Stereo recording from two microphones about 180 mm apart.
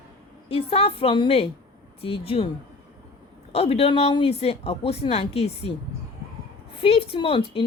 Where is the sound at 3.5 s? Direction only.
35° left (ahead or behind).